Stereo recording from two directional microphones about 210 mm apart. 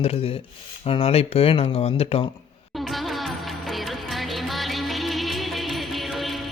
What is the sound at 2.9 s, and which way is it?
Music, centre (ahead or behind).